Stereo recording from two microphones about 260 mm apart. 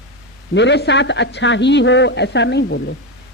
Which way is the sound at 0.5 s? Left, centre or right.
Left.